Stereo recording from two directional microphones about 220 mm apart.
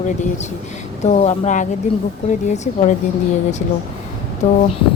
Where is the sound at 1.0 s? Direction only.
30° left (ahead or behind).